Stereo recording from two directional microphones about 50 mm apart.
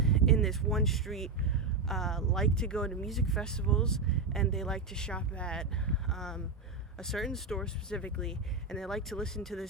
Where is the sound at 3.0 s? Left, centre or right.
Centre.